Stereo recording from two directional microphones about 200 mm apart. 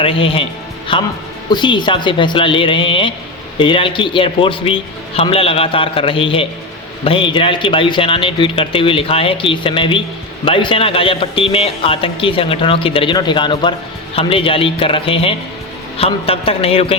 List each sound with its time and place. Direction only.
0.0 s speech: 25° left (ahead or behind)